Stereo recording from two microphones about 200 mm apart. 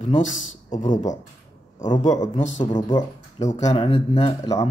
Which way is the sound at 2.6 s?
20° left (ahead or behind).